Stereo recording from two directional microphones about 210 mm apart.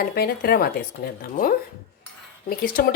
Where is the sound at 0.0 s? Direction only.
45° left (ahead or behind).